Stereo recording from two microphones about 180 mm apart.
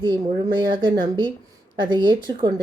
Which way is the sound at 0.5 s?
25° right (ahead or behind).